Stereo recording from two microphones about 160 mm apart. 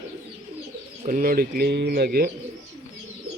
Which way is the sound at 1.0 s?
60° right (ahead or behind).